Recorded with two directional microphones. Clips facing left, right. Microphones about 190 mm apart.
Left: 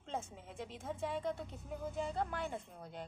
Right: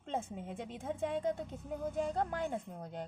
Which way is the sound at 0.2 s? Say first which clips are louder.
Right 5 dB; 55° right (ahead or behind).